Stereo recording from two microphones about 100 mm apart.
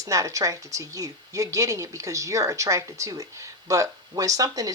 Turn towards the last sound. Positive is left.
turn(degrees=-35)  # may be behind; listen again after turning